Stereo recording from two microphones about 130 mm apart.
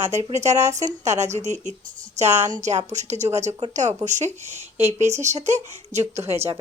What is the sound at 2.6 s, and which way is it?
A woman's voice, 60° right (ahead or behind).